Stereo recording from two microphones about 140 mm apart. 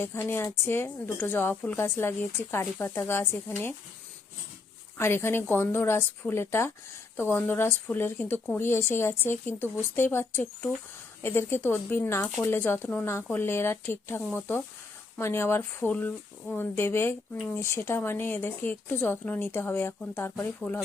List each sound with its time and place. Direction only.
0.0 s speech: 15° left (ahead or behind)
4.9 s speech: 15° left (ahead or behind)